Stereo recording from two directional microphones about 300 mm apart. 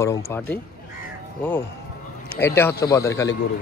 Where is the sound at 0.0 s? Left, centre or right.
Centre.